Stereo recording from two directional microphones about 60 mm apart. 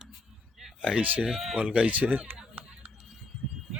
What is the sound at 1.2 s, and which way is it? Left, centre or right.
Speech, centre.